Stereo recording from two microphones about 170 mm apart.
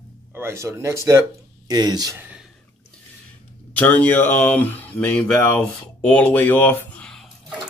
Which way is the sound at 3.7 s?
10° left (ahead or behind).